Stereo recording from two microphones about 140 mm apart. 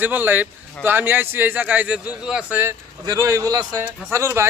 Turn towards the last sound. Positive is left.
turn(degrees=-20)  # may be behind; listen again after turning